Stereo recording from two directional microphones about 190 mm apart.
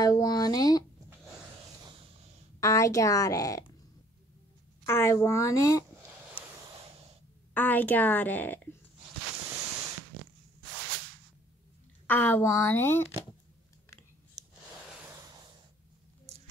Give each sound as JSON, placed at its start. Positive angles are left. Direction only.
{"t": 0.0, "sound": "speech", "side_deg": 20}
{"t": 2.6, "sound": "a woman's voice", "side_deg": 15}
{"t": 4.8, "sound": "a woman's voice", "side_deg": 15}
{"t": 7.5, "sound": "a woman's voice", "side_deg": 10}
{"t": 12.1, "sound": "a woman's voice", "side_deg": 10}
{"t": 14.4, "sound": "a sound", "side_deg": -20}